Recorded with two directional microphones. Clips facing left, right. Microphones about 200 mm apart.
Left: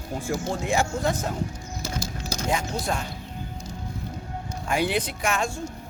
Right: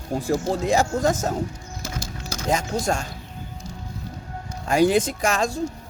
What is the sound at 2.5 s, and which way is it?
Speech, 45° right (ahead or behind).